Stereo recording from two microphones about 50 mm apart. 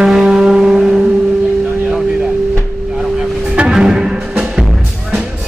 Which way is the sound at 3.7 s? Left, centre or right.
Centre.